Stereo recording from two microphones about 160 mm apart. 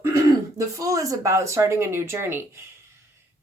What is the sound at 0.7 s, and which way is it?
Speech, 20° right (ahead or behind).